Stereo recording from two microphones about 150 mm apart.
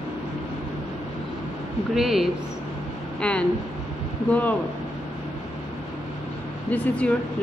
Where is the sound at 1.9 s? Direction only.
Centre (ahead or behind).